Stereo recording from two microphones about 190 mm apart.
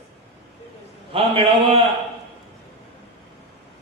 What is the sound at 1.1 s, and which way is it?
Speech, 30° right (ahead or behind).